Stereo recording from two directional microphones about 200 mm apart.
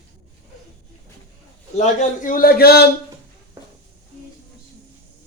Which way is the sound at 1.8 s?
40° left (ahead or behind).